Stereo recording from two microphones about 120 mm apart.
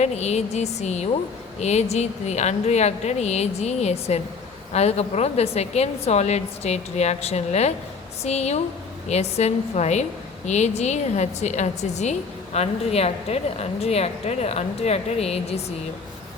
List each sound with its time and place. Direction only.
0.0 s a woman's voice: 65° left (ahead or behind)